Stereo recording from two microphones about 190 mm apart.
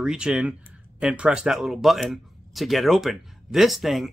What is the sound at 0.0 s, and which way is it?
Speech, 5° right (ahead or behind).